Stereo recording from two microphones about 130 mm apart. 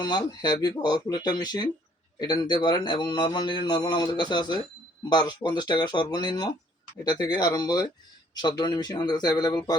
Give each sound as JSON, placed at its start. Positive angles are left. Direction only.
{"t": 0.0, "sound": "a man's voice", "side_deg": 30}